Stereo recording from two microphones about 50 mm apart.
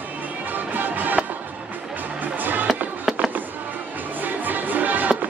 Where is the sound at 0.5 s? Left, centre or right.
Right.